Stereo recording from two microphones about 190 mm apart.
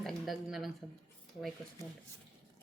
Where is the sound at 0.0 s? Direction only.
Centre (ahead or behind).